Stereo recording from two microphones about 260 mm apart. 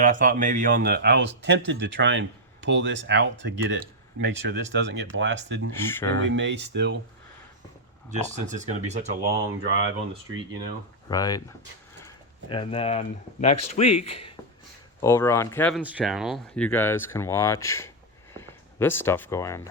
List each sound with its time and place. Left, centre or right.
0.0 s speech: right
5.7 s speech: centre
6.1 s speech: right
8.1 s speech: right
11.1 s speech: centre
15.0 s speech: centre
15.8 s speech: centre